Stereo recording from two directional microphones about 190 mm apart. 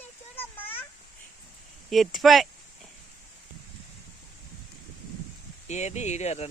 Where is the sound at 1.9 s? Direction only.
Centre (ahead or behind).